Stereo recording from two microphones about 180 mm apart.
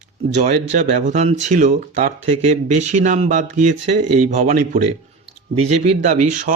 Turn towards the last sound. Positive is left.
turn(degrees=-45)  # may be behind; listen again after turning